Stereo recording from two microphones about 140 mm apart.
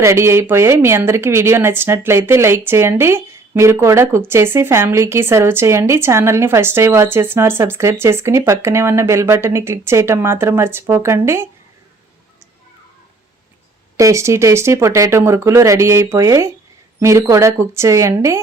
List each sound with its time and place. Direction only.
0.0 s speech: 20° right (ahead or behind)
13.9 s speech: 20° right (ahead or behind)